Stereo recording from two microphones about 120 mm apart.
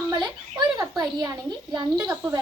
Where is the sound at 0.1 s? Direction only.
35° right (ahead or behind).